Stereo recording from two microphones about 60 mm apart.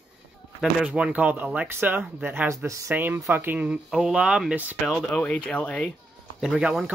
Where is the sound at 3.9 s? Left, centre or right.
Centre.